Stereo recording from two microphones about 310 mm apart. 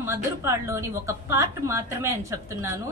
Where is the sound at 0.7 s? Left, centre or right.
Centre.